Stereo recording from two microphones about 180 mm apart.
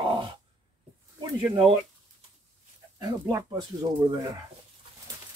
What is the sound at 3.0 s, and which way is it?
Speech, 20° right (ahead or behind).